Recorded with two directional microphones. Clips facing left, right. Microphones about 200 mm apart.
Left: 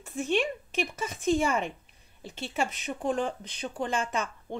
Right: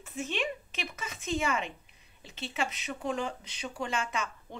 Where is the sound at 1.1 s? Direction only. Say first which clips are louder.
Left 6 dB; 50° left (ahead or behind).